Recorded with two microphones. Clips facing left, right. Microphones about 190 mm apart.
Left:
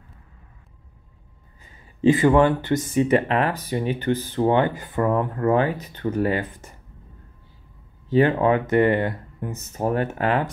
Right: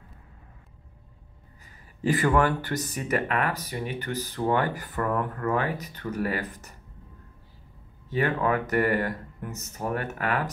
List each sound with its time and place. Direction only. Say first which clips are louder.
2.0 s speech: left 7 dB; 20° left (ahead or behind)
8.1 s speech: left 7 dB; 30° left (ahead or behind)